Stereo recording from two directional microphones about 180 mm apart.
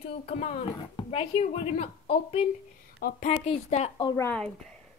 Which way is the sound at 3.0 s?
55° left (ahead or behind).